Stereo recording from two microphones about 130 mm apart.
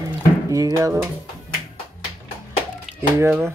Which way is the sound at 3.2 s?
15° right (ahead or behind).